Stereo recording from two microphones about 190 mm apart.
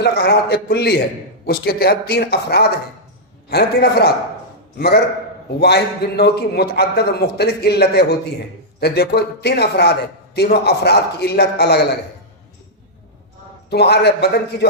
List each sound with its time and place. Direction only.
0.0 s a man's voice: 55° left (ahead or behind)
13.7 s a man's voice: 60° left (ahead or behind)